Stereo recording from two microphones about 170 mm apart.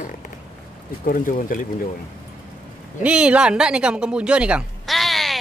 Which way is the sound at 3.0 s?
5° right (ahead or behind).